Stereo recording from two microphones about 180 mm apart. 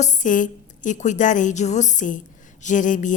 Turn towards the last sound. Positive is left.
turn(degrees=45)  # may be behind; listen again after turning